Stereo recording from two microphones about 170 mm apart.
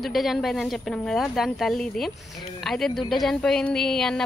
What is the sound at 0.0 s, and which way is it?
Speech, centre (ahead or behind).